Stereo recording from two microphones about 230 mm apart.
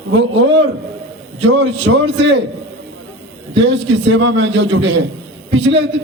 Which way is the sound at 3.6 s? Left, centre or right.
Right.